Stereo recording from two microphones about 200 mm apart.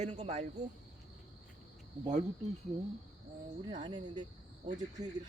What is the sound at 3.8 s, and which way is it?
Speech, 25° right (ahead or behind).